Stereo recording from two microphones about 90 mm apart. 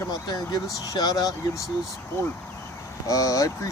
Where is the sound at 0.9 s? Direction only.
45° left (ahead or behind).